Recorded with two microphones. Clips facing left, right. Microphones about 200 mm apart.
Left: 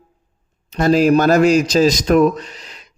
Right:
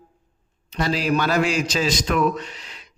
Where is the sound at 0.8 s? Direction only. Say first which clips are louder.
Left 9 dB; 45° left (ahead or behind).